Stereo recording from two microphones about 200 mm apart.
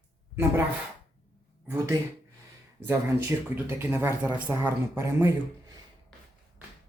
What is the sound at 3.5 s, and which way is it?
Speech, 10° right (ahead or behind).